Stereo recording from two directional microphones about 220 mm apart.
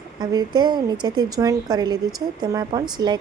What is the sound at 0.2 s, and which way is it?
A woman's voice, 20° right (ahead or behind).